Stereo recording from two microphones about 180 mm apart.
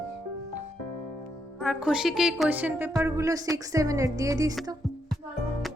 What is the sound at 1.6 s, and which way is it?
A woman's voice, 5° right (ahead or behind).